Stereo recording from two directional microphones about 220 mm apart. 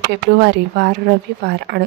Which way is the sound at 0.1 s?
50° right (ahead or behind).